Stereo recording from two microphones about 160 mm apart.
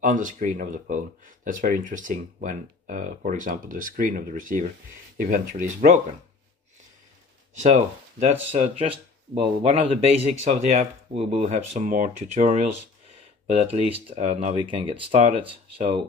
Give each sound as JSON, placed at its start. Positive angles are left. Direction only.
{"t": 0.0, "sound": "speech", "side_deg": -55}
{"t": 7.7, "sound": "speech", "side_deg": -45}